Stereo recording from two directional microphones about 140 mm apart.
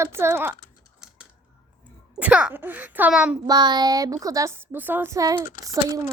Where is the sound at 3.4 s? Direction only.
30° right (ahead or behind).